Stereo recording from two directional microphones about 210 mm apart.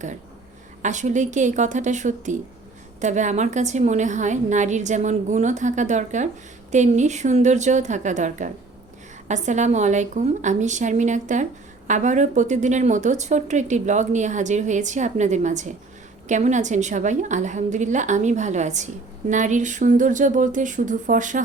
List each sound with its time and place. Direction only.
0.8 s a woman's voice: 35° right (ahead or behind)